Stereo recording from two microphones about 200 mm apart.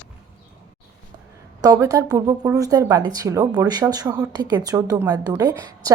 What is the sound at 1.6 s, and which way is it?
Speech, 15° right (ahead or behind).